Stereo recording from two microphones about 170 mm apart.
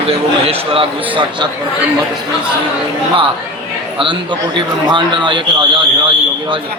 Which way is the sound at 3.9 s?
30° right (ahead or behind).